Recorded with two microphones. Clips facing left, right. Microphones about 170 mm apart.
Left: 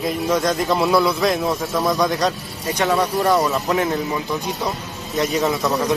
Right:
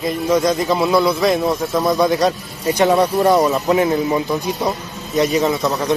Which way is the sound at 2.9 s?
20° right (ahead or behind).